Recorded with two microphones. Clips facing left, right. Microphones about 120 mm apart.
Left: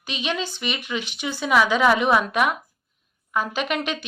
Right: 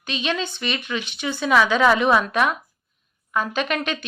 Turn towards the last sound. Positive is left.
turn(degrees=15)  # may be behind; listen again after turning